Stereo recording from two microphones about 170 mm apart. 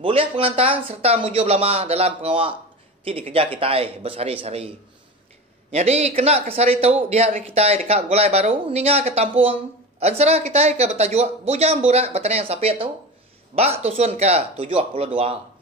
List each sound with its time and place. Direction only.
0.0 s speech: 30° right (ahead or behind)